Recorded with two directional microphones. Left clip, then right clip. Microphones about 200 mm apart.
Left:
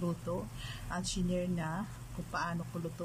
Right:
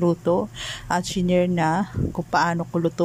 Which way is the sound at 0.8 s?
40° right (ahead or behind).